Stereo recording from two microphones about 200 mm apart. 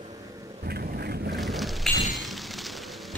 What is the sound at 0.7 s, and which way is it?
Vehicle, 50° right (ahead or behind).